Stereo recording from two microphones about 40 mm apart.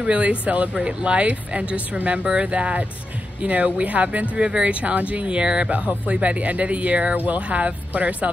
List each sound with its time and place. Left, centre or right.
0.0 s speech: right
3.4 s speech: right
5.7 s speech: right